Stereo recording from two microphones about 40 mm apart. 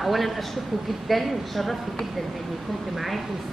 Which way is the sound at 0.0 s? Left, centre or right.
Centre.